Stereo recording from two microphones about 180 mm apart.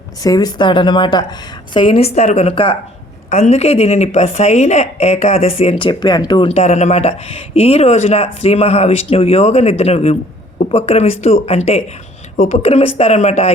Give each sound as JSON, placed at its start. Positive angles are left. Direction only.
{"t": 0.2, "sound": "speech", "side_deg": 20}